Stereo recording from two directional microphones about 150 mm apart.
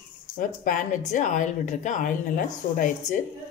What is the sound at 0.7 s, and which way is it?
Speech, 55° left (ahead or behind).